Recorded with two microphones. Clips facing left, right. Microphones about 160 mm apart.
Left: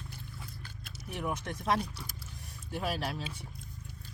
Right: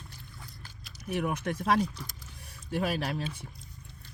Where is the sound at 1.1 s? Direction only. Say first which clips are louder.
Right 5 dB; 70° right (ahead or behind).